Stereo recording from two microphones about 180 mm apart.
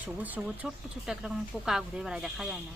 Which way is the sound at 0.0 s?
10° right (ahead or behind).